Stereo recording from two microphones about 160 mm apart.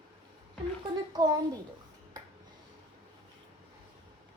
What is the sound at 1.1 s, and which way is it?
Child singing, 25° right (ahead or behind).